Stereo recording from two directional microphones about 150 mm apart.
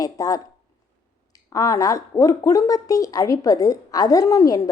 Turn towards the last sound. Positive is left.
turn(degrees=20)  # may be behind; listen again after turning